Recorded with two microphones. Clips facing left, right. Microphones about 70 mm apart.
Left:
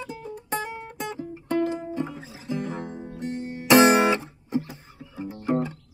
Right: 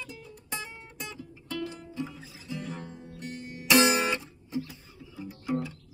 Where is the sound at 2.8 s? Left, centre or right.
Left.